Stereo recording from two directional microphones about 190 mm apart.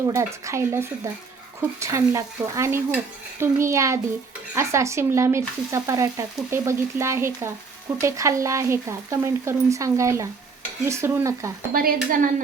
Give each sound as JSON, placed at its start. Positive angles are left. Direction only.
{"t": 0.1, "sound": "frying", "side_deg": -15}
{"t": 11.7, "sound": "speech", "side_deg": -50}